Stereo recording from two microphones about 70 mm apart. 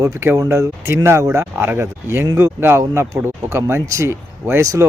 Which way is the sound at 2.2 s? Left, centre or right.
Right.